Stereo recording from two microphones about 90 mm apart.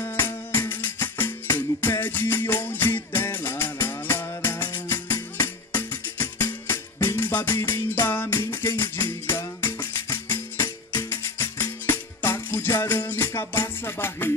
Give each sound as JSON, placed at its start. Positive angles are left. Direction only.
{"t": 0.0, "sound": "music", "side_deg": 25}